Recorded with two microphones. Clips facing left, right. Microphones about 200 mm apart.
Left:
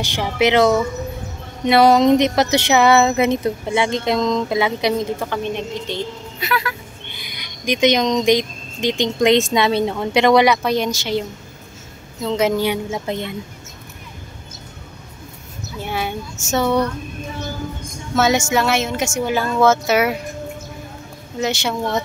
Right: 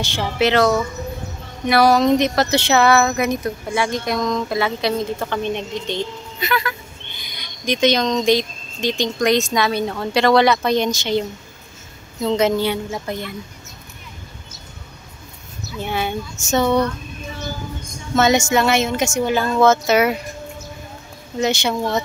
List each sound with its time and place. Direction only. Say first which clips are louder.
0.0 s speech: left 1 dB; 15° left (ahead or behind)
5.2 s speech: even; 5° left (ahead or behind)
12.3 s speech: even; 10° left (ahead or behind)
15.8 s speech: right 1 dB; 5° left (ahead or behind)
18.1 s speech: right 1 dB; 5° left (ahead or behind)
21.4 s speech: right 2 dB; centre (ahead or behind)